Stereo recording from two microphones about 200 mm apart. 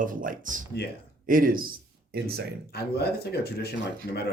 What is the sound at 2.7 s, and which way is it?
Speech, 50° left (ahead or behind).